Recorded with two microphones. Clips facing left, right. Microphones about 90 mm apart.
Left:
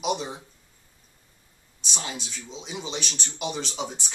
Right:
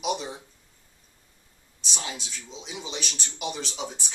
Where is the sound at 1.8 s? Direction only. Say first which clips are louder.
Left 1 dB; centre (ahead or behind).